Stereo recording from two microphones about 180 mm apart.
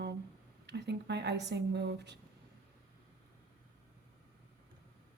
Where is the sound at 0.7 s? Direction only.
70° right (ahead or behind).